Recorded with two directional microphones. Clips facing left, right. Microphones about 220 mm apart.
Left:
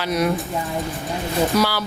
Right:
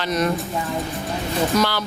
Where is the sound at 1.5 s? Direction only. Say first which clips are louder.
Right 1 dB; 10° left (ahead or behind).